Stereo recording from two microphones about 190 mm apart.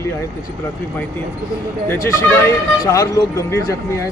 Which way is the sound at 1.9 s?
15° left (ahead or behind).